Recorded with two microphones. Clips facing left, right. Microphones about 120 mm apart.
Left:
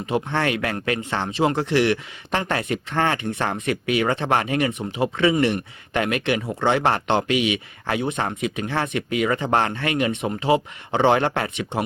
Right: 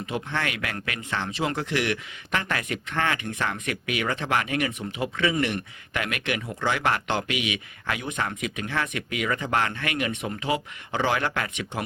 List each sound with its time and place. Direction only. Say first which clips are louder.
0.0 s speech: left 6 dB; 30° left (ahead or behind)